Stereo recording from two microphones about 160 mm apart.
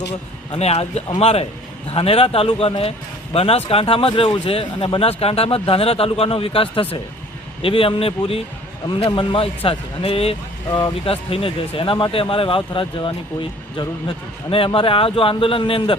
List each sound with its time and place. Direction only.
0.1 s speech: 40° left (ahead or behind)